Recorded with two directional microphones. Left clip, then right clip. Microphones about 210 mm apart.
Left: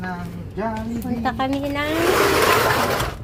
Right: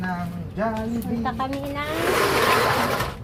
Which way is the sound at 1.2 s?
55° left (ahead or behind).